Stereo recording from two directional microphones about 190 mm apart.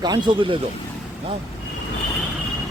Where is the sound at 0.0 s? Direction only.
20° right (ahead or behind).